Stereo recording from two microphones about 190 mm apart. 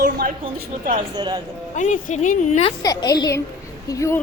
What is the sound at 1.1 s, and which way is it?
Speech, 20° right (ahead or behind).